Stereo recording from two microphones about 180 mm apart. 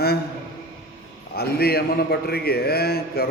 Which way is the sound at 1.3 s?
60° left (ahead or behind).